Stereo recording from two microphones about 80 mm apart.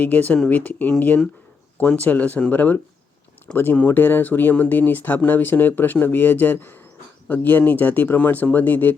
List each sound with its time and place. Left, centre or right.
0.0 s speech: left